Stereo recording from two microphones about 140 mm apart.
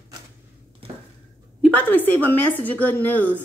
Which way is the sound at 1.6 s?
10° left (ahead or behind).